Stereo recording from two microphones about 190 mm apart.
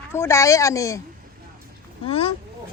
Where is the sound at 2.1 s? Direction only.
30° left (ahead or behind).